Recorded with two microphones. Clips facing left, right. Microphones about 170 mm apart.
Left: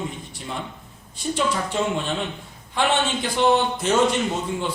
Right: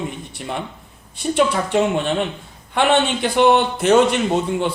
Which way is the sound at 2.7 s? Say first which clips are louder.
Right 5 dB; 60° right (ahead or behind).